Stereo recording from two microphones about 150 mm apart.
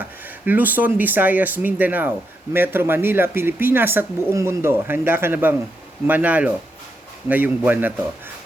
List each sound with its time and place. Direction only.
0.0 s speech: 10° right (ahead or behind)